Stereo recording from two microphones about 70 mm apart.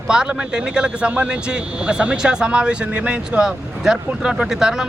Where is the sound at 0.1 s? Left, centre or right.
Centre.